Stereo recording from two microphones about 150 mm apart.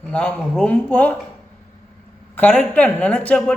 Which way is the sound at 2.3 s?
10° left (ahead or behind).